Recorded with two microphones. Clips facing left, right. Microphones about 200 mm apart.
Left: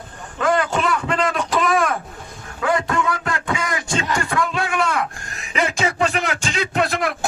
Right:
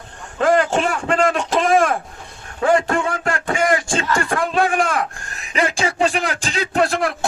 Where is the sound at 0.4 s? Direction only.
35° right (ahead or behind).